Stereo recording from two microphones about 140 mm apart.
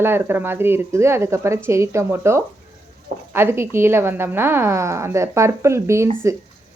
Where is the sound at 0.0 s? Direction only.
15° right (ahead or behind).